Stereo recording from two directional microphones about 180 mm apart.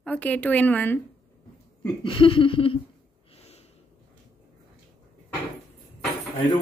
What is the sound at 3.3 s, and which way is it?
Snort, 35° left (ahead or behind).